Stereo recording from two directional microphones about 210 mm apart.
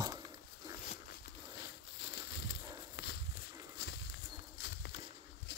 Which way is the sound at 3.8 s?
55° left (ahead or behind).